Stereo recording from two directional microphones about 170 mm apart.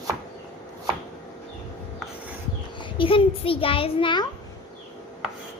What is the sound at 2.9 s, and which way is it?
A child's voice, 30° left (ahead or behind).